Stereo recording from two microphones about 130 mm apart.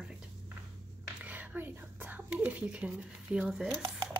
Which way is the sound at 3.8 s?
35° right (ahead or behind).